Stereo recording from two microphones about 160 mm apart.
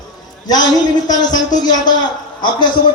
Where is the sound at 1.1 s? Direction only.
25° left (ahead or behind).